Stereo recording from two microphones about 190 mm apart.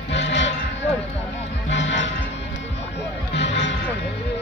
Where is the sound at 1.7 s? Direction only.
70° left (ahead or behind).